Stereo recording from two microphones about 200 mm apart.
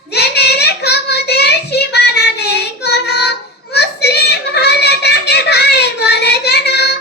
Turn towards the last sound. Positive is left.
turn(degrees=55)  # may be behind; listen again after turning